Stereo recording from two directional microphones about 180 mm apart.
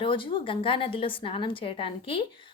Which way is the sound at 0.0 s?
30° left (ahead or behind).